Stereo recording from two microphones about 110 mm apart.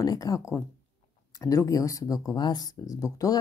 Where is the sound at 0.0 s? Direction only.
35° left (ahead or behind).